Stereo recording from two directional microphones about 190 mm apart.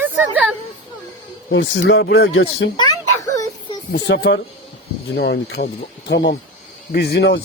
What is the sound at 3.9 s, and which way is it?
Speech, 60° left (ahead or behind).